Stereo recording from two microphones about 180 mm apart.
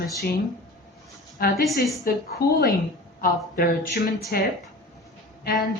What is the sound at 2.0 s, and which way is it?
A woman's voice, 55° left (ahead or behind).